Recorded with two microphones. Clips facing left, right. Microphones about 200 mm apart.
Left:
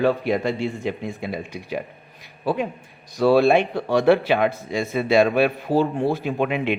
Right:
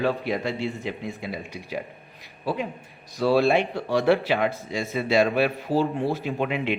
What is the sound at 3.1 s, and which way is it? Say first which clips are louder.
A man's voice: left 4 dB; 55° left (ahead or behind).